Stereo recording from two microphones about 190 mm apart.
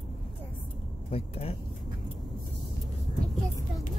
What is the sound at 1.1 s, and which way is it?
Speech, 30° left (ahead or behind).